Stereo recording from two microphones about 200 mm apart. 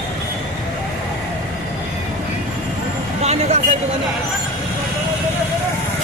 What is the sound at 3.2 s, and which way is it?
Vehicle, 30° right (ahead or behind).